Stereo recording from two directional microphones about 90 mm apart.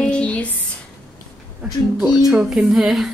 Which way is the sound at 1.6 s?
5° right (ahead or behind).